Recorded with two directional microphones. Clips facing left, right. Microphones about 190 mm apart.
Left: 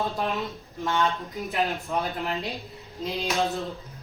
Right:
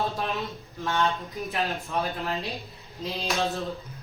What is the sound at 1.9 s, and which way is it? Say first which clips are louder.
Speech: left 1 dB; 15° left (ahead or behind).